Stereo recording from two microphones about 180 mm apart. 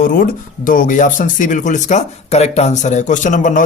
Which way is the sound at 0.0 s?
50° left (ahead or behind).